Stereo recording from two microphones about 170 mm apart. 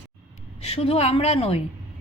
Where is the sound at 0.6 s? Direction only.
35° left (ahead or behind).